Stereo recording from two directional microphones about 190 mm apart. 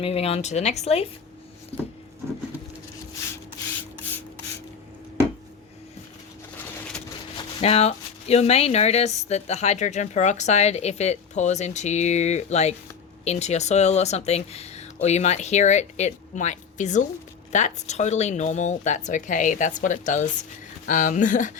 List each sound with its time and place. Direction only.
0.0 s speech: 30° left (ahead or behind)
7.6 s speech: 35° left (ahead or behind)